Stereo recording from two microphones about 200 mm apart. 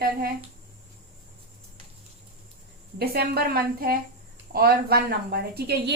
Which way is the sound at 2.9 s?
50° right (ahead or behind).